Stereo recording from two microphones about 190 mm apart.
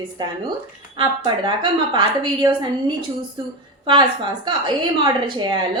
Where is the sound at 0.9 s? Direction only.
25° right (ahead or behind).